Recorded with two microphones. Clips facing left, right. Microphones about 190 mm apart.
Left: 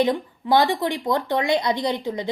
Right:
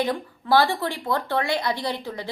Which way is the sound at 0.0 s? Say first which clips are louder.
Left 4 dB; 20° left (ahead or behind).